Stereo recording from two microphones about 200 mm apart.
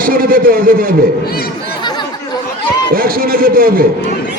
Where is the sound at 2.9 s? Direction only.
45° right (ahead or behind).